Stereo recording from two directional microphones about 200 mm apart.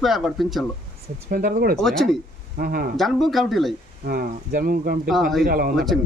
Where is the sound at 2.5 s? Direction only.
50° right (ahead or behind).